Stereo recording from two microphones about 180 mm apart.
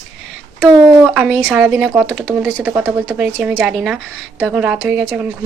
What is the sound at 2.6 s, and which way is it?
A woman's voice, 10° right (ahead or behind).